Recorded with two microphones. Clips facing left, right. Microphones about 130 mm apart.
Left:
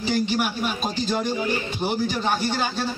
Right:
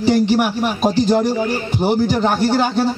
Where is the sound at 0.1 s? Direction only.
55° right (ahead or behind).